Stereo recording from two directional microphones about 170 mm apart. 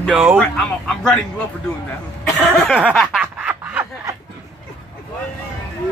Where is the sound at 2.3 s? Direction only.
5° left (ahead or behind).